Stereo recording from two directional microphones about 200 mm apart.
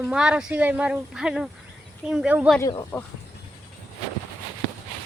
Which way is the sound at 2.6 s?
20° left (ahead or behind).